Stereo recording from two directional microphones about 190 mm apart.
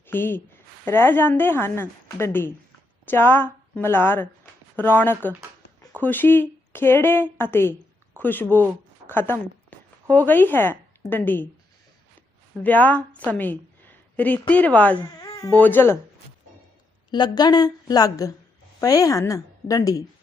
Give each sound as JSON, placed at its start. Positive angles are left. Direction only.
{"t": 0.1, "sound": "a woman's voice", "side_deg": 10}
{"t": 12.6, "sound": "a woman's voice", "side_deg": 10}
{"t": 17.1, "sound": "a woman's voice", "side_deg": 20}